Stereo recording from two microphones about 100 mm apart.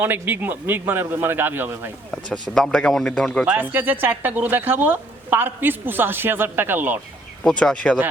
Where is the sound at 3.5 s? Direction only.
20° right (ahead or behind).